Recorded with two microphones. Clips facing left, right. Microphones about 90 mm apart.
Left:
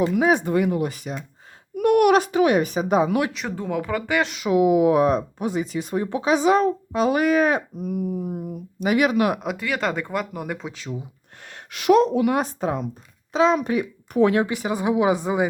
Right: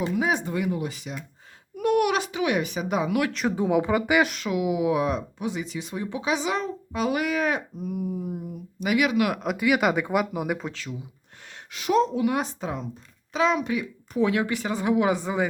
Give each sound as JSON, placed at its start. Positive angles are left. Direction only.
{"t": 0.1, "sound": "a woman's voice", "side_deg": 55}
{"t": 3.5, "sound": "speech", "side_deg": -15}
{"t": 4.5, "sound": "speech", "side_deg": 45}
{"t": 8.8, "sound": "speech", "side_deg": 35}
{"t": 9.6, "sound": "speech", "side_deg": -10}
{"t": 10.7, "sound": "speech", "side_deg": 20}
{"t": 11.7, "sound": "a woman's voice", "side_deg": 65}
{"t": 13.3, "sound": "speech", "side_deg": 35}
{"t": 13.6, "sound": "speech", "side_deg": 45}
{"t": 14.1, "sound": "a woman's voice", "side_deg": 60}
{"t": 14.4, "sound": "speech", "side_deg": 20}